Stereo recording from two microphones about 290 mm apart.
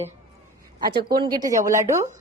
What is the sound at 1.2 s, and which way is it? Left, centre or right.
Speech, centre.